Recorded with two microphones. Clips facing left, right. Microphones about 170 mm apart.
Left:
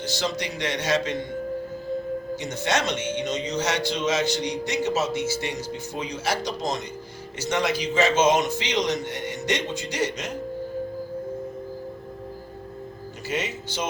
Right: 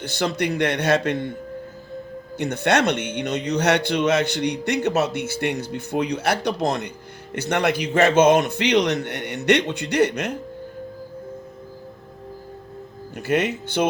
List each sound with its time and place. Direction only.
0.0 s a man's voice: 60° right (ahead or behind)
2.3 s a man's voice: 60° right (ahead or behind)
13.2 s a man's voice: 60° right (ahead or behind)